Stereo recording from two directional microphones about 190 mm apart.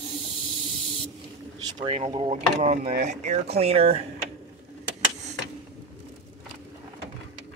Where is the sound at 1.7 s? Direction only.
35° right (ahead or behind).